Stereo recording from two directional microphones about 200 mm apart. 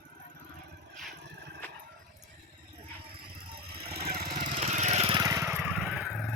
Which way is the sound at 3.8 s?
50° right (ahead or behind).